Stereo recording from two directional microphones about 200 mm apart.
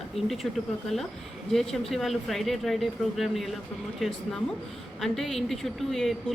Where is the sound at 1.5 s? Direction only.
Centre (ahead or behind).